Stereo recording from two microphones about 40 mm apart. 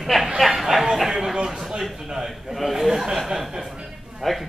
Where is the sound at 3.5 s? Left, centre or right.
Centre.